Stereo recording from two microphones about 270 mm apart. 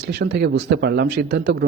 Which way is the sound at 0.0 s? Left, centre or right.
Right.